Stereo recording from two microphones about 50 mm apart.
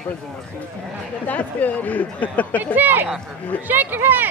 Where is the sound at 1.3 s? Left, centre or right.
Left.